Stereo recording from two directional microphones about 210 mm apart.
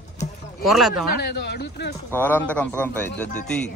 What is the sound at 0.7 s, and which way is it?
Speech, centre (ahead or behind).